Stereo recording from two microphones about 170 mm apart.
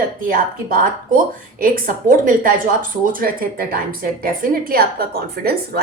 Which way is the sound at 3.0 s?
55° right (ahead or behind).